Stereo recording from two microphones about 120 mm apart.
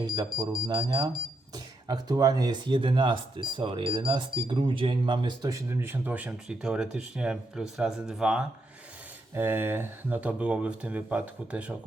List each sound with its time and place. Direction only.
0.0 s speech: 40° right (ahead or behind); by 8.4 s 5° right (ahead or behind)
9.3 s speech: 20° right (ahead or behind)